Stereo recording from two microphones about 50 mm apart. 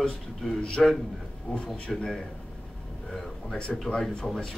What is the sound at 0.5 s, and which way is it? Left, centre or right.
Speech, left.